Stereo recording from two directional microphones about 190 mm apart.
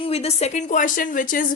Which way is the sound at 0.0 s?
35° left (ahead or behind).